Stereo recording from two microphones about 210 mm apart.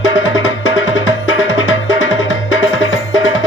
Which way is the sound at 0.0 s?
65° left (ahead or behind).